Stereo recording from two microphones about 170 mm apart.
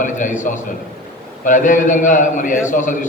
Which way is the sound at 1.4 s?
50° left (ahead or behind).